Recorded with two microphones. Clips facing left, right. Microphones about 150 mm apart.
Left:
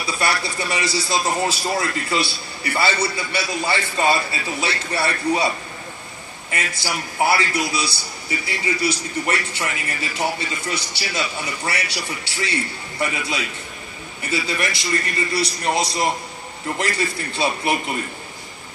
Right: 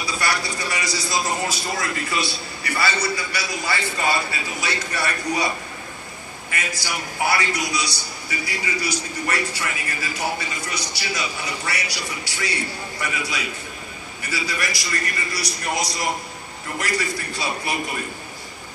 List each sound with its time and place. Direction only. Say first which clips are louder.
0.0 s a man's voice: left 2 dB; 25° left (ahead or behind)
6.5 s a man's voice: left 2 dB; 25° left (ahead or behind)
10.7 s a man's voice: left 2 dB; 25° left (ahead or behind)